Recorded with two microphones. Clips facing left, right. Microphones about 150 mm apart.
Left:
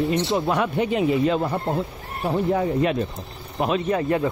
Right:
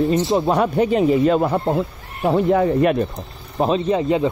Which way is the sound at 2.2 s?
85° right.